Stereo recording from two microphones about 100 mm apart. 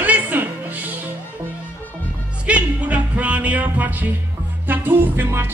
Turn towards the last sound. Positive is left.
turn(degrees=-20)  # may be behind; listen again after turning